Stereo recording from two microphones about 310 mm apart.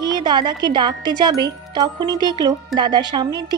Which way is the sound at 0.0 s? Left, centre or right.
Centre.